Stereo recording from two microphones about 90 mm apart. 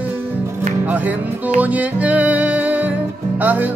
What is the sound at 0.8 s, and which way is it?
Music, 20° right (ahead or behind).